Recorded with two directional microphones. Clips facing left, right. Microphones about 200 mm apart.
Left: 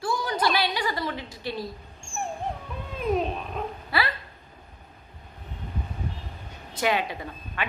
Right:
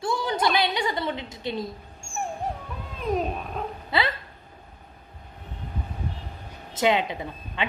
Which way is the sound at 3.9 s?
20° right (ahead or behind).